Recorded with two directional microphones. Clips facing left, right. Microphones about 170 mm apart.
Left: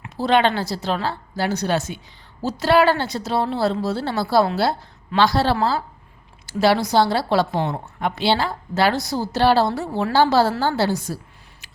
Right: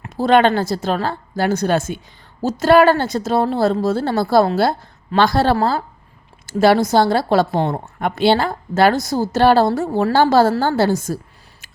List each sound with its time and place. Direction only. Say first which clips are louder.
0.0 s a woman's voice: right 4 dB; 50° right (ahead or behind)